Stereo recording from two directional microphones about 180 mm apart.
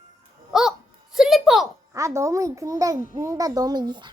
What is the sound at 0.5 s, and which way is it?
A child's voice, centre (ahead or behind).